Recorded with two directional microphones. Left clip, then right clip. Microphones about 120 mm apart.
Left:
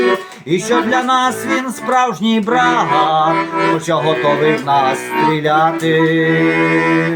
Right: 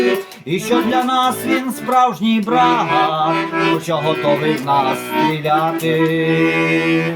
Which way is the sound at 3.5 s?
30° right (ahead or behind).